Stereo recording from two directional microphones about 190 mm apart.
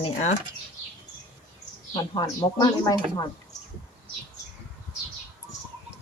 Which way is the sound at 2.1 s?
15° left (ahead or behind).